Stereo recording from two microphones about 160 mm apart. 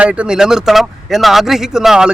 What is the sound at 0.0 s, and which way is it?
Speech, 5° right (ahead or behind).